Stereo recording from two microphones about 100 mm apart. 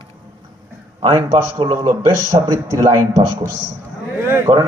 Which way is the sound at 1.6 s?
55° right (ahead or behind).